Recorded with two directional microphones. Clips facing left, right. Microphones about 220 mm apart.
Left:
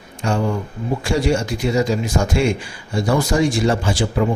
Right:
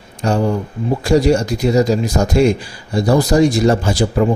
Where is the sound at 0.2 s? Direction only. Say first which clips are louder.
Right 4 dB; 40° right (ahead or behind).